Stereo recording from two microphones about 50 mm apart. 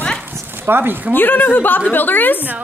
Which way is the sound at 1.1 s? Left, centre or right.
Left.